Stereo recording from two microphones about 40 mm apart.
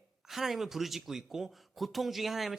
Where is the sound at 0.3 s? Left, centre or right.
Centre.